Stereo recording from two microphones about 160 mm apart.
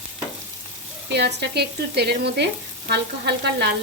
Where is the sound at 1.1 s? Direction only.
90° right.